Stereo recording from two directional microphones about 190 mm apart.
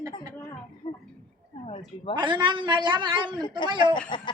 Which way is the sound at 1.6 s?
25° left (ahead or behind).